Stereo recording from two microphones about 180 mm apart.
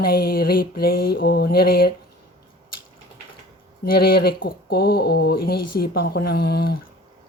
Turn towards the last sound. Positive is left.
turn(degrees=60)  # may be behind; listen again after turning